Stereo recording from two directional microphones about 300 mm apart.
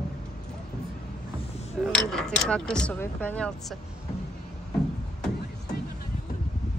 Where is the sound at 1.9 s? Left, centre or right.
Centre.